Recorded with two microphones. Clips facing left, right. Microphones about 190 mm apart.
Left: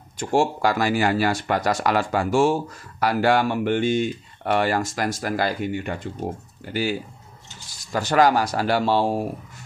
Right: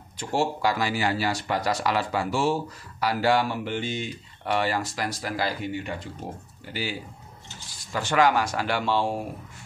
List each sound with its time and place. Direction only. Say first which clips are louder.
0.2 s speech: left 5 dB; 50° left (ahead or behind)